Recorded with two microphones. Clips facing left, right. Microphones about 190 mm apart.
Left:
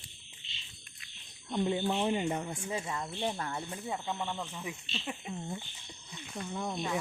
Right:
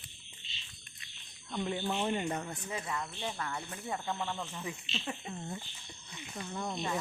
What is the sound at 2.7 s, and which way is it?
Speech, 25° left (ahead or behind).